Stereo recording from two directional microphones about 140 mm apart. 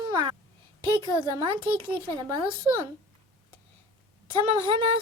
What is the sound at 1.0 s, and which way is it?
Child singing, 35° right (ahead or behind).